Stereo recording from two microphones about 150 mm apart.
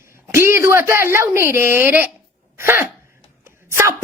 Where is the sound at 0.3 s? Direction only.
15° right (ahead or behind).